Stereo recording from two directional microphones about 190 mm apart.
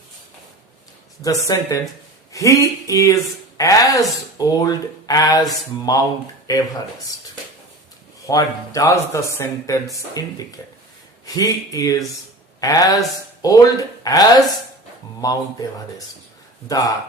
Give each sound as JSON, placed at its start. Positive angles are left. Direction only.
{"t": 1.2, "sound": "speech", "side_deg": 20}
{"t": 8.3, "sound": "speech", "side_deg": 15}
{"t": 16.6, "sound": "speech", "side_deg": 20}